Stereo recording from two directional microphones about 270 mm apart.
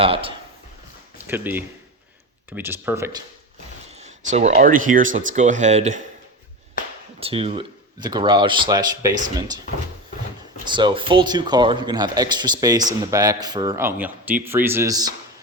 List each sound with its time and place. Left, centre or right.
0.0 s speech: centre
1.2 s a man's voice: centre
3.9 s speech: right
7.2 s a man's voice: right
10.7 s a man's voice: centre